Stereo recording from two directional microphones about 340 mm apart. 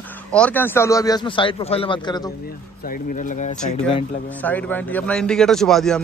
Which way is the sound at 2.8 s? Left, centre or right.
Left.